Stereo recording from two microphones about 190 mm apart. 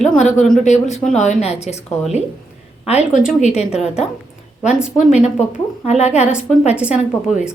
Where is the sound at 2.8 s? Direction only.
35° left (ahead or behind).